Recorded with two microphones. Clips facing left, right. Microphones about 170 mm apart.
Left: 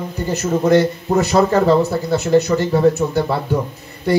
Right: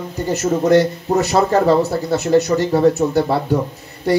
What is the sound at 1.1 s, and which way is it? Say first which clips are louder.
Speech: even; 35° right (ahead or behind).